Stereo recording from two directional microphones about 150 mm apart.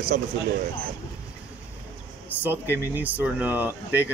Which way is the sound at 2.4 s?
15° right (ahead or behind).